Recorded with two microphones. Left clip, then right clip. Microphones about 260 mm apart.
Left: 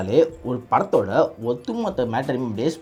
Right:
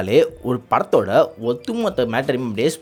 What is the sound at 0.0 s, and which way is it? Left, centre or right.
Speech, right.